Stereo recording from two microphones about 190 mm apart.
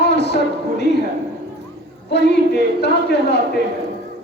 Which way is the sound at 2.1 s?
60° left (ahead or behind).